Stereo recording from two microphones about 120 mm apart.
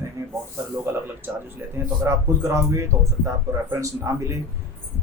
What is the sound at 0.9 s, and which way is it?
Speech, 20° right (ahead or behind).